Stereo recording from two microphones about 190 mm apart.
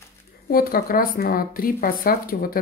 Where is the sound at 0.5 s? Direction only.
50° left (ahead or behind).